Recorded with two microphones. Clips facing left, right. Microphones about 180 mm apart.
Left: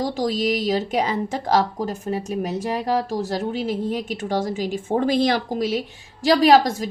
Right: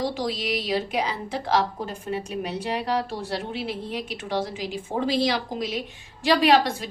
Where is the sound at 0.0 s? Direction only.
45° left (ahead or behind).